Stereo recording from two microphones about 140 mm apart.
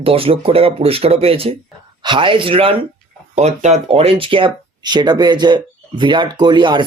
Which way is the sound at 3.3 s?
55° right (ahead or behind).